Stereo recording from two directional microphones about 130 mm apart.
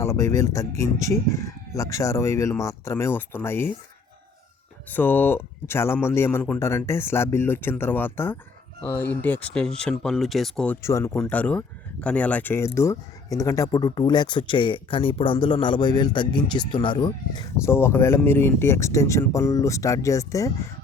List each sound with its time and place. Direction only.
0.0 s speech: 20° left (ahead or behind)
4.9 s speech: 15° left (ahead or behind)
10.8 s speech: 20° left (ahead or behind); by 17.4 s 35° left (ahead or behind)
17.7 s speech: 20° left (ahead or behind)